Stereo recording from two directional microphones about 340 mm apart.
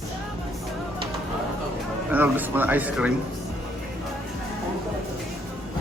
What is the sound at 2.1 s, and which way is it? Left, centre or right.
Speech, centre.